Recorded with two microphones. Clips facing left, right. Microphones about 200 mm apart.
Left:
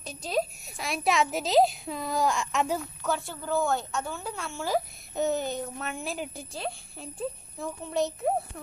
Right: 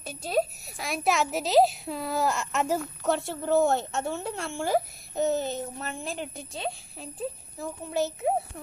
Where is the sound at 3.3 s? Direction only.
25° right (ahead or behind).